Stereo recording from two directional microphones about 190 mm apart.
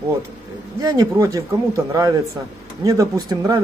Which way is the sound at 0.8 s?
15° right (ahead or behind).